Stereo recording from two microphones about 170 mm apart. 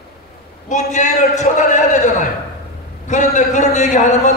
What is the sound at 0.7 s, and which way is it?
A man's voice, 45° left (ahead or behind).